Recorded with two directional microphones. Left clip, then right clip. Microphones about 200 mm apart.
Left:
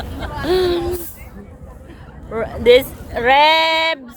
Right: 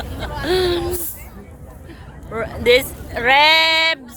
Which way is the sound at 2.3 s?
15° left (ahead or behind).